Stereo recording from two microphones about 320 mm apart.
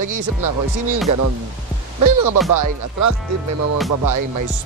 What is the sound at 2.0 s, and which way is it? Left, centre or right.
Speech, right.